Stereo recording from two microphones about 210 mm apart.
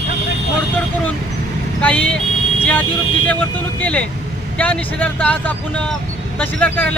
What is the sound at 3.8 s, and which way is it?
Speech, 5° left (ahead or behind).